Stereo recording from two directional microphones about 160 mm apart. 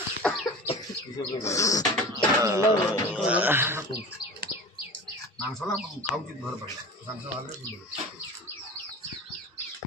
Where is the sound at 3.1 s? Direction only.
5° right (ahead or behind).